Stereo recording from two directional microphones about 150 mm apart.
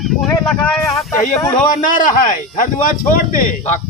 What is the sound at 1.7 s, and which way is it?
Speech, 60° left (ahead or behind).